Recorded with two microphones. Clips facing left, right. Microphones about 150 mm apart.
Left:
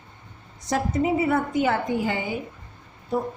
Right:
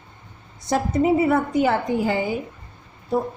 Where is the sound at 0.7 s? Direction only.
35° right (ahead or behind).